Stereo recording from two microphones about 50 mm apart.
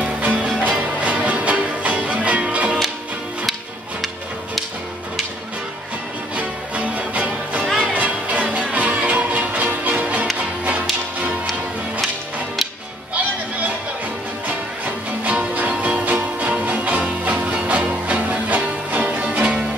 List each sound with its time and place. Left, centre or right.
0.0 s music: right
6.3 s music: right
15.2 s music: right